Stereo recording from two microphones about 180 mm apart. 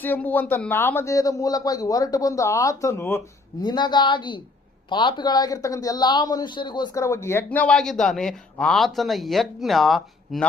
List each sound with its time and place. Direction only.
0.0 s a woman's voice: 10° left (ahead or behind)